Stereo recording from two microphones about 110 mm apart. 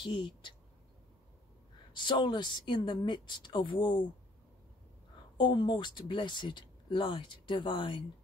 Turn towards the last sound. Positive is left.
turn(degrees=45)  # may be behind; listen again after turning